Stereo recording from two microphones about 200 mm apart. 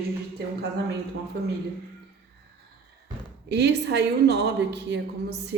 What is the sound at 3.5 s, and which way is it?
A woman's voice, 60° right (ahead or behind).